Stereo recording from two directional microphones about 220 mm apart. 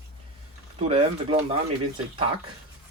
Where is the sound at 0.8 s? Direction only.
25° right (ahead or behind).